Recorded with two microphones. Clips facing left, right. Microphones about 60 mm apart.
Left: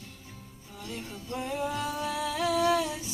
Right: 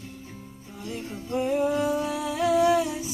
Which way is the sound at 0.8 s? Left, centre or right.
Right.